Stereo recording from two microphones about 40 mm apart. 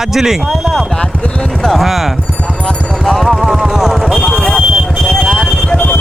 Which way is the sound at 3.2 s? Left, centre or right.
Centre.